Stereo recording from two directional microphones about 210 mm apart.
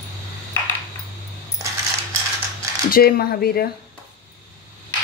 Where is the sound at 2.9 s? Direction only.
45° left (ahead or behind).